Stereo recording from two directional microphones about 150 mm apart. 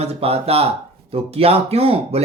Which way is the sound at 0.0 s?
45° right (ahead or behind).